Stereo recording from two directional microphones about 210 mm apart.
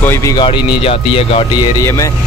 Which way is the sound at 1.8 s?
15° left (ahead or behind).